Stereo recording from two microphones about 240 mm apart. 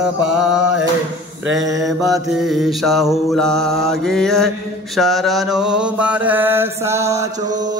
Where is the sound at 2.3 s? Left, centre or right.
Centre.